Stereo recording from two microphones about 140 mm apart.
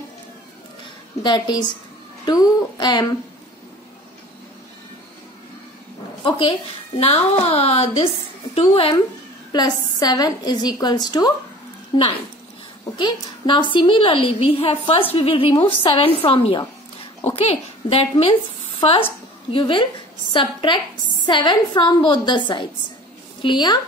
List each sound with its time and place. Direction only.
1.2 s a woman's voice: 35° left (ahead or behind)
6.2 s a woman's voice: 40° left (ahead or behind)
9.5 s a woman's voice: 30° left (ahead or behind)